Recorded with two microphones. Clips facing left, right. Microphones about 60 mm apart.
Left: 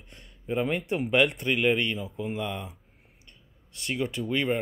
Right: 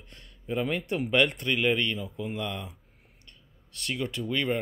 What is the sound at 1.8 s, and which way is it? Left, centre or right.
Speech, centre.